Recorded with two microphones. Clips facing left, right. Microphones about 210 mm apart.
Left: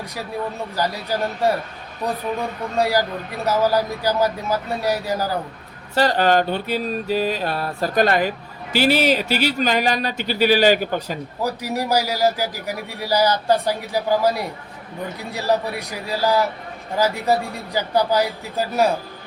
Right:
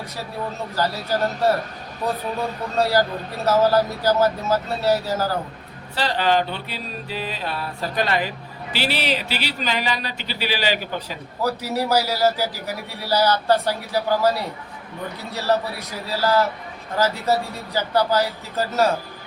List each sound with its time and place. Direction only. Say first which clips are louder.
0.8 s a man's voice: right 1 dB; 15° left (ahead or behind)
2.7 s a man's voice: even; 15° left (ahead or behind)
5.9 s speech: left 4 dB; 45° left (ahead or behind)
11.4 s a man's voice: right 1 dB; 15° left (ahead or behind)